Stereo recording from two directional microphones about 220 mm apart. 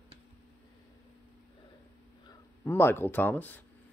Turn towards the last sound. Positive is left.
turn(degrees=10)  # may be behind; listen again after turning